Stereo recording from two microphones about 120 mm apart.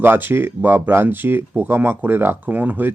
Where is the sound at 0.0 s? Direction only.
15° right (ahead or behind).